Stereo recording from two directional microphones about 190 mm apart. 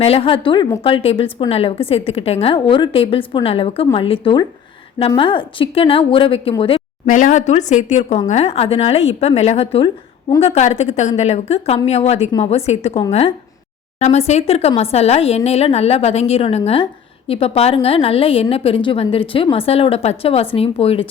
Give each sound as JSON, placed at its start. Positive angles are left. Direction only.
{"t": 0.0, "sound": "a woman's voice", "side_deg": 30}